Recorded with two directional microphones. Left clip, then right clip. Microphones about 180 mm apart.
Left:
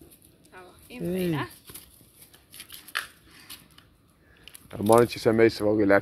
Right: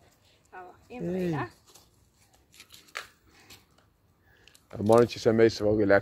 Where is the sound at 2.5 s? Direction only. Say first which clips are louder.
Left 8 dB; 40° left (ahead or behind).